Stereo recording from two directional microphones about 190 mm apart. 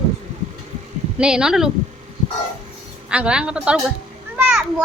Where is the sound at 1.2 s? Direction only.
5° right (ahead or behind).